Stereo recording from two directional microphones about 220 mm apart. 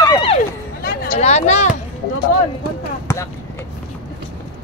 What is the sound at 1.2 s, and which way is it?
Speech, 30° left (ahead or behind).